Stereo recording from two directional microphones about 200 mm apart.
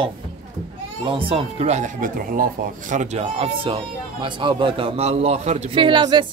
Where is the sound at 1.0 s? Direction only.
25° right (ahead or behind).